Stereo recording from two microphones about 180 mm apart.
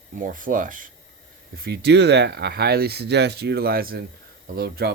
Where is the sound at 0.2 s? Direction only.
50° right (ahead or behind).